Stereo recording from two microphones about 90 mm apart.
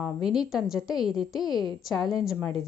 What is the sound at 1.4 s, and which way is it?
Speech, 50° left (ahead or behind).